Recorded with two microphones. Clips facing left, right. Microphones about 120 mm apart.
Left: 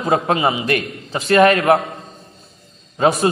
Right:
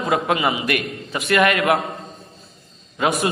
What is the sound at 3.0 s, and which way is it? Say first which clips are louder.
Speech: left 5 dB; 30° left (ahead or behind).